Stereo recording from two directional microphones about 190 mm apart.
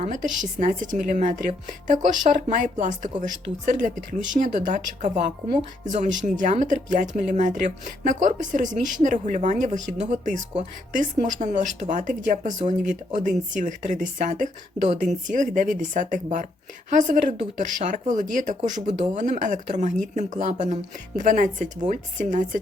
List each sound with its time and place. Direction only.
0.0 s a woman's voice: 40° right (ahead or behind)